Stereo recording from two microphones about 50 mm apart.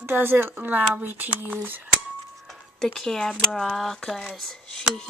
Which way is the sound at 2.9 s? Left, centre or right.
Centre.